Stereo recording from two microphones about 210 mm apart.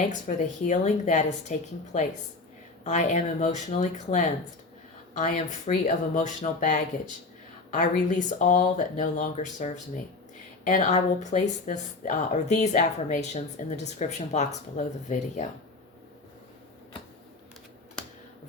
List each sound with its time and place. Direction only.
0.1 s speech: 35° left (ahead or behind)
18.0 s finger snapping: 5° left (ahead or behind)